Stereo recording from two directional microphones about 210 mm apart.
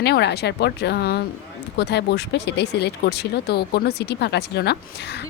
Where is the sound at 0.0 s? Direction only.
55° left (ahead or behind).